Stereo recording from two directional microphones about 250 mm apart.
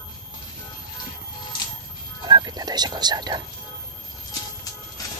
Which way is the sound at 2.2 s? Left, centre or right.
Centre.